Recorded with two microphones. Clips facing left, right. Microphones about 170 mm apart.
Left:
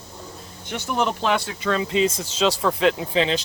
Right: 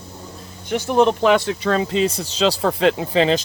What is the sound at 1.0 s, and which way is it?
Speech, 65° right (ahead or behind).